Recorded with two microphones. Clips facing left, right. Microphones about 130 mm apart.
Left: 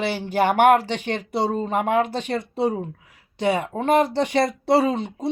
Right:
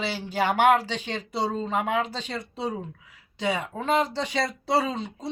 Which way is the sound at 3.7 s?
55° left (ahead or behind).